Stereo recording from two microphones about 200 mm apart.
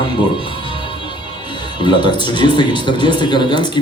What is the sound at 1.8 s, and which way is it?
Speech, 20° left (ahead or behind).